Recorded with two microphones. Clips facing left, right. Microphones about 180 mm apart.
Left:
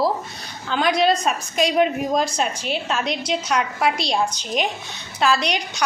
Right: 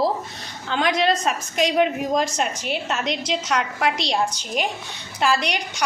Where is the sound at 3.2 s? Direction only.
90° right.